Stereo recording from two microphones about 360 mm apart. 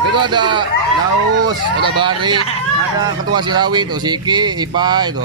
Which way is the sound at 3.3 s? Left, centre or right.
Centre.